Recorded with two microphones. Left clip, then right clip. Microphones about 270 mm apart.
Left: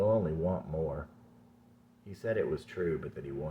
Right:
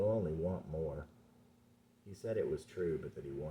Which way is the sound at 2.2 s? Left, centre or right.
Centre.